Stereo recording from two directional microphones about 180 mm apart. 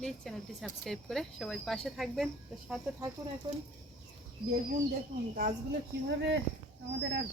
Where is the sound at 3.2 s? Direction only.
20° right (ahead or behind).